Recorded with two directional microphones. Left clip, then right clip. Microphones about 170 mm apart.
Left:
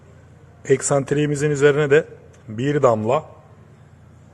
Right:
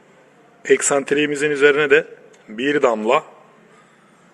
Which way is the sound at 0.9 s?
15° left (ahead or behind).